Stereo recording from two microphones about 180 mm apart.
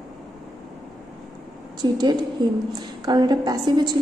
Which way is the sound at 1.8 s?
25° right (ahead or behind).